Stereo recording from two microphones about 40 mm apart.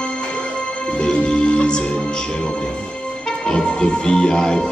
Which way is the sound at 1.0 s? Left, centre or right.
Left.